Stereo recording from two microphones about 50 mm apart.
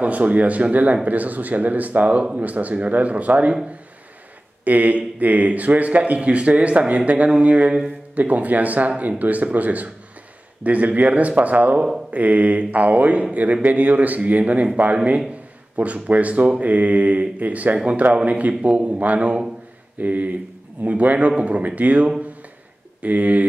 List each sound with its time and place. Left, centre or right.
0.0 s speech: right
4.6 s speech: right